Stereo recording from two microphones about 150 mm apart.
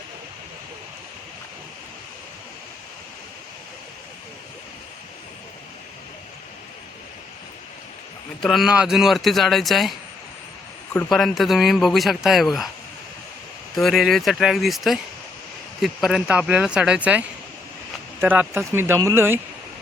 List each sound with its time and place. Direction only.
8.4 s speech: centre (ahead or behind)
11.1 s speech: centre (ahead or behind)
13.7 s speech: centre (ahead or behind); by 19.4 s 15° right (ahead or behind)